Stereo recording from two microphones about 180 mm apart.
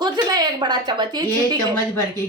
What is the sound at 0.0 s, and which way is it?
A woman's voice, 20° right (ahead or behind).